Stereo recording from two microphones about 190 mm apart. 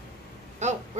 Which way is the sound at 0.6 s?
35° right (ahead or behind).